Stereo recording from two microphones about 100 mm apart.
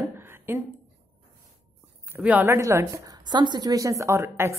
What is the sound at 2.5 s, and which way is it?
Speech, 25° right (ahead or behind).